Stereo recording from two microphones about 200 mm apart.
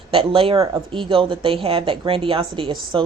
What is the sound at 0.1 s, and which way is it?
A woman's voice, 25° right (ahead or behind).